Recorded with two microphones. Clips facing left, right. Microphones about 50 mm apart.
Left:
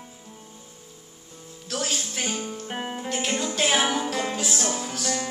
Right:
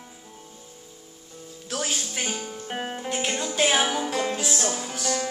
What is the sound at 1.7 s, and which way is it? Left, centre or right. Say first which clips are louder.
Music: even; centre.